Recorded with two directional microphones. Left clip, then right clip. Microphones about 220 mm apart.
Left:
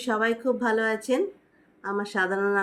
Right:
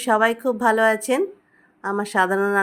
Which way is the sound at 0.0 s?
50° right (ahead or behind).